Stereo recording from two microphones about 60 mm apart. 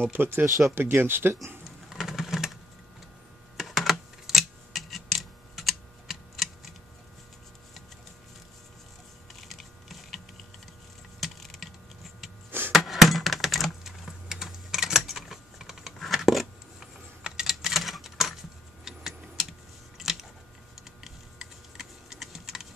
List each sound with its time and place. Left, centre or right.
0.1 s speech: right
1.9 s a sound: centre
3.5 s typing: centre
9.5 s typing: centre
12.4 s a sound: right
12.7 s typing: centre
18.9 s clock: centre
20.0 s a sound: centre
21.0 s typing: centre